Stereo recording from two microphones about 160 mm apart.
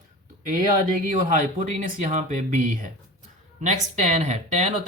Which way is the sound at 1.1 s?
55° right (ahead or behind).